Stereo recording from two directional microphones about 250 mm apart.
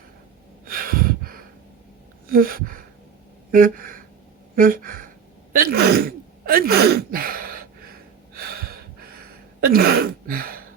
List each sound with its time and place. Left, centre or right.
0.6 s a sound: right
3.5 s gasp: right
4.5 s speech: right
5.5 s sneeze: right